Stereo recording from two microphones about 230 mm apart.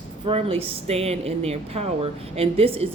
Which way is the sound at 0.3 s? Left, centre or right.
Right.